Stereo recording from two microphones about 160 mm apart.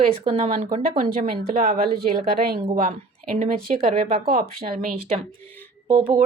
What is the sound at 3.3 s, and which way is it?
Speech, 45° right (ahead or behind).